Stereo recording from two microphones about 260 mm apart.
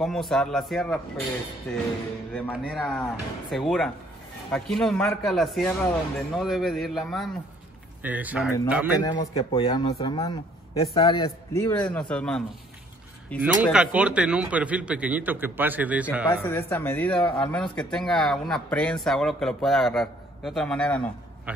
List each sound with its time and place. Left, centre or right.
0.0 s speech: centre
9.0 s a man's voice: centre
16.4 s speech: centre